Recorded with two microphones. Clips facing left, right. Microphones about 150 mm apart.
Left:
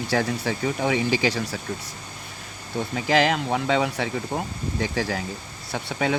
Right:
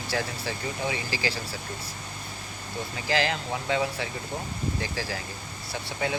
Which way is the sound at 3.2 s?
65° left (ahead or behind).